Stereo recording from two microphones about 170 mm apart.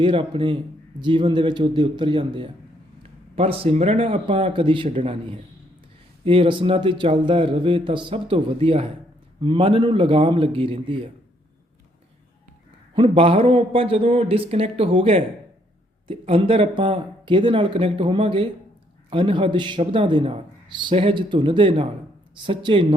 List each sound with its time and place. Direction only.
0.0 s a man's voice: 30° right (ahead or behind)
12.9 s a man's voice: 30° right (ahead or behind)